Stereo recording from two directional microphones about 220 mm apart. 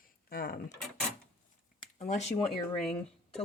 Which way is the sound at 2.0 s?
30° left (ahead or behind).